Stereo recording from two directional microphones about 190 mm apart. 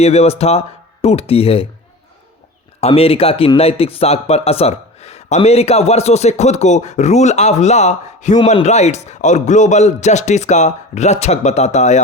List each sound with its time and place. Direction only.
0.0 s a man's voice: 35° left (ahead or behind)
2.8 s a man's voice: 30° left (ahead or behind)